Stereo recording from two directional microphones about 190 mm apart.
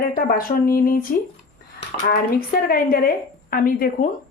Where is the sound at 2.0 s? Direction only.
50° left (ahead or behind).